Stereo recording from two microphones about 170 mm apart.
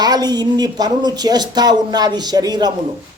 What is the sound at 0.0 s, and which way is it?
Speech, 25° right (ahead or behind).